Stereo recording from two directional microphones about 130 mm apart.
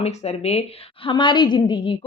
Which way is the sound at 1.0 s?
40° left (ahead or behind).